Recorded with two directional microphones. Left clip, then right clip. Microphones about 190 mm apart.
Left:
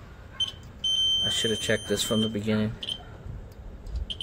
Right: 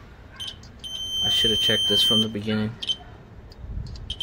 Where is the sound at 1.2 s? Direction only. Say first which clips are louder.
Right 6 dB; 15° right (ahead or behind).